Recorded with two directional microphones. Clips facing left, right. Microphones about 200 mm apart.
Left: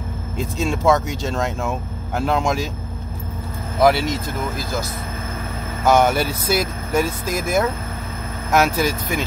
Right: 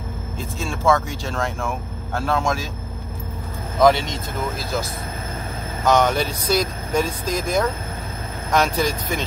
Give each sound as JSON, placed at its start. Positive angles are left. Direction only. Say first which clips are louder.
{"t": 0.4, "sound": "speech", "louder": "left 5 dB", "side_deg": 20}
{"t": 3.8, "sound": "speech", "louder": "even", "side_deg": 5}
{"t": 5.9, "sound": "speech", "louder": "left 2 dB", "side_deg": 5}